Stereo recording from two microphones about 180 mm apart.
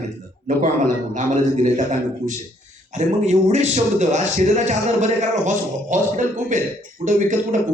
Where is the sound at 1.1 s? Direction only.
40° right (ahead or behind).